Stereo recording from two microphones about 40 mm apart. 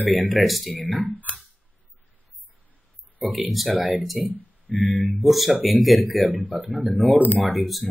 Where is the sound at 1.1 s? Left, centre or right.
Left.